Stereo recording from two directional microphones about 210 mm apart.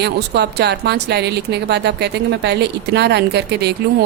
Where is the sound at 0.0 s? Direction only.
50° right (ahead or behind).